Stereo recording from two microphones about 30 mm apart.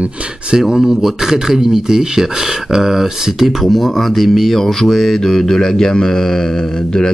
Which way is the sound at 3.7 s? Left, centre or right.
Centre.